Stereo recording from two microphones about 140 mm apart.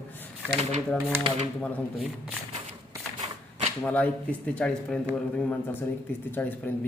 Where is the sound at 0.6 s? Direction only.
50° right (ahead or behind).